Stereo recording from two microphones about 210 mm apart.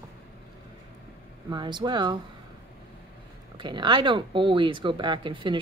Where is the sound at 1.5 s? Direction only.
20° right (ahead or behind).